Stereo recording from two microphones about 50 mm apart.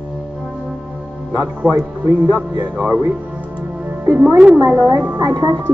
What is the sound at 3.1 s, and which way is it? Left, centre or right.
Music, right.